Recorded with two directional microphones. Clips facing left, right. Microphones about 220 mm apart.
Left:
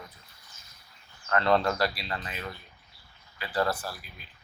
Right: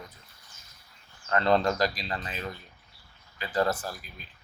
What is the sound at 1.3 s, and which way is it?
Speech, 30° right (ahead or behind).